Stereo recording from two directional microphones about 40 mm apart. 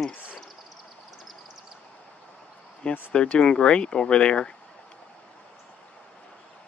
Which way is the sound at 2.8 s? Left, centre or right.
Left.